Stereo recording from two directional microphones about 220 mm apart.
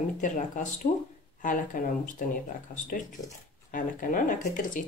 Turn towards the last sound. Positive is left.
turn(degrees=35)  # may be behind; listen again after turning